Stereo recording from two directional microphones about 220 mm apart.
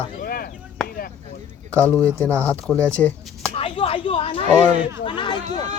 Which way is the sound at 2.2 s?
5° left (ahead or behind).